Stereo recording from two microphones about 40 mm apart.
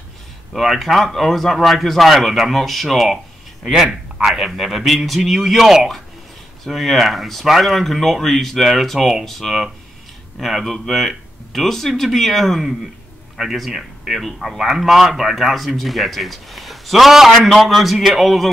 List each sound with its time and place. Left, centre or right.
0.5 s speech: centre
4.4 s speech: centre